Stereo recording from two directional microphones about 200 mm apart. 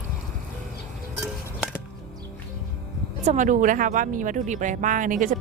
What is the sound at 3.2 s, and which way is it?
Speech, 40° right (ahead or behind).